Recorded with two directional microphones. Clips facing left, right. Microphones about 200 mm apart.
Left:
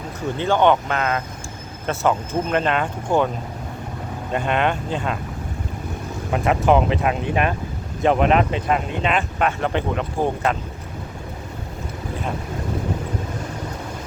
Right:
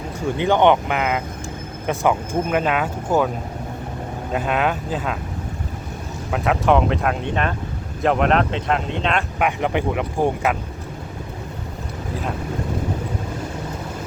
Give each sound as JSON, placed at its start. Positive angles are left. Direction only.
{"t": 0.3, "sound": "speech", "side_deg": -15}
{"t": 4.3, "sound": "speech", "side_deg": -5}
{"t": 6.3, "sound": "speech", "side_deg": 0}
{"t": 9.4, "sound": "speech", "side_deg": -15}